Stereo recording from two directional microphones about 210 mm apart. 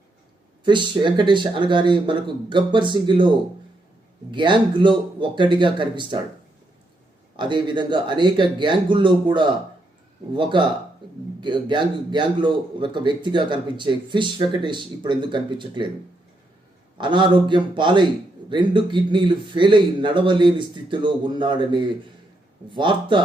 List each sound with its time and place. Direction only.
0.6 s a man's voice: 20° right (ahead or behind)
7.3 s a man's voice: 20° right (ahead or behind)
17.0 s a man's voice: 20° right (ahead or behind)